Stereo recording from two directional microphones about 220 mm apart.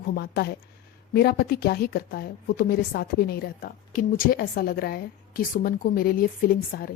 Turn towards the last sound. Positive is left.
turn(degrees=40)  # may be behind; listen again after turning